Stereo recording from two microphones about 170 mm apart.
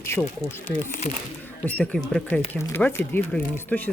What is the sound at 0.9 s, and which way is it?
Speech, 45° left (ahead or behind).